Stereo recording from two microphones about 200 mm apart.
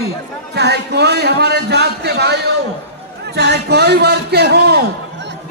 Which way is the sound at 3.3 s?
55° right (ahead or behind).